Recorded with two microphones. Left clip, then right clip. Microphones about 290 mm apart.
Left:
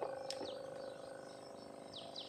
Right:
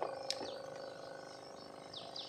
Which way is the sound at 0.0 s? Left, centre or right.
Right.